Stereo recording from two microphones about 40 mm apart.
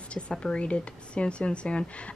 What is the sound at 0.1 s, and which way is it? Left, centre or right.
Speech, left.